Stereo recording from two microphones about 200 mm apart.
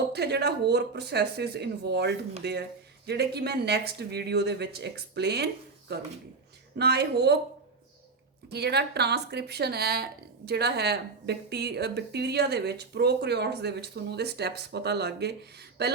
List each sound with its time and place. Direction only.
0.1 s speech: 55° right (ahead or behind)
8.4 s speech: 55° right (ahead or behind)